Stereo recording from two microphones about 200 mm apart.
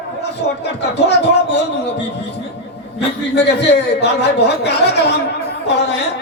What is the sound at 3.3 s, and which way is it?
A man's voice, 55° left (ahead or behind).